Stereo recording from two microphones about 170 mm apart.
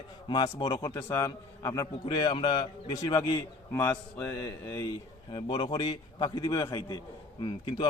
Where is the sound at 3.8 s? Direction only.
15° left (ahead or behind).